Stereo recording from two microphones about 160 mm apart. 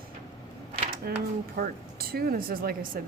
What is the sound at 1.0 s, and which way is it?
Speech, 75° right (ahead or behind).